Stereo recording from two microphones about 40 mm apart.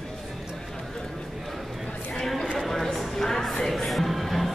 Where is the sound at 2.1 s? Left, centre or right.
Centre.